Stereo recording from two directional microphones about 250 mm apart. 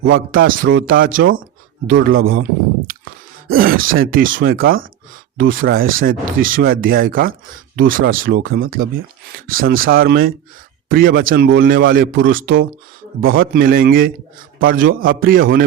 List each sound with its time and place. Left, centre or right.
0.2 s speech: right
3.5 s speech: right